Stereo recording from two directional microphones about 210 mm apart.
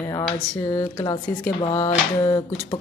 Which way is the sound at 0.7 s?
20° left (ahead or behind).